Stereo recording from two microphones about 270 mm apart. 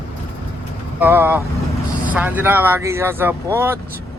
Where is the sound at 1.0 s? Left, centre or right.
Centre.